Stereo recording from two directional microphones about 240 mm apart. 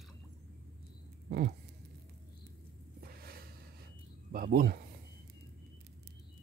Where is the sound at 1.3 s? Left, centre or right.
Right.